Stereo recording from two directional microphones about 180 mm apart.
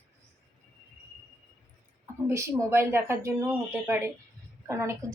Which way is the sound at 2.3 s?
15° right (ahead or behind).